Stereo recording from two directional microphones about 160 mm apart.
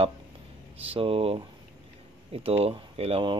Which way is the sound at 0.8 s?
35° right (ahead or behind).